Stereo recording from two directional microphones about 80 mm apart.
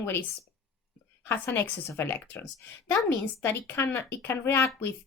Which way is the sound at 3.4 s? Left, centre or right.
Left.